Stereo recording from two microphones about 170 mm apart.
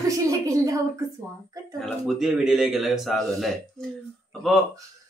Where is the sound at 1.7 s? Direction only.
Centre (ahead or behind).